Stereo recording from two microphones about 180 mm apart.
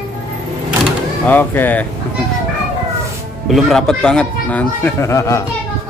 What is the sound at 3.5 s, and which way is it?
A man's voice, centre (ahead or behind).